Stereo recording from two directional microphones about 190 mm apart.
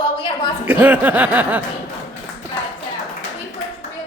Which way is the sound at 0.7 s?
10° right (ahead or behind).